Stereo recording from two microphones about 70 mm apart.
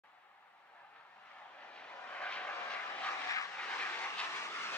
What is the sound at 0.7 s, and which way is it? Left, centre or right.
Vehicle, centre.